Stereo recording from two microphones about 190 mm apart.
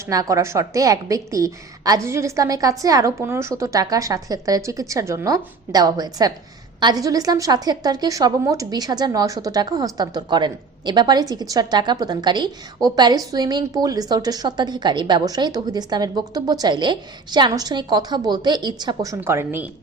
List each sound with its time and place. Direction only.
0.0 s a woman's voice: 15° right (ahead or behind)